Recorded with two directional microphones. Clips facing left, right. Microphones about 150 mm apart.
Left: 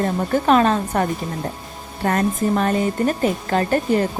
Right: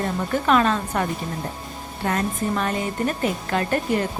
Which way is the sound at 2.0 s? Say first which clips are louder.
Left 5 dB; 45° left (ahead or behind).